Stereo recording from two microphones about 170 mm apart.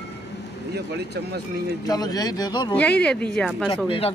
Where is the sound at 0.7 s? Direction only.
75° right (ahead or behind).